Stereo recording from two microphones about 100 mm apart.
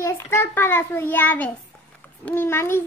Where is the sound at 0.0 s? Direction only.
25° left (ahead or behind).